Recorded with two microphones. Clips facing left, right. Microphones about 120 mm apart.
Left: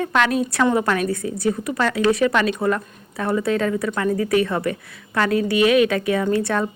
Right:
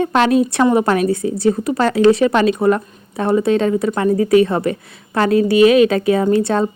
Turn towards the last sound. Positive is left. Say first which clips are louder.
# right 5 dB
turn(degrees=-25)  # may be behind; listen again after turning